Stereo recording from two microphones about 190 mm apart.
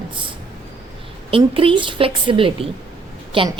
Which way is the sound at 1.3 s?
30° right (ahead or behind).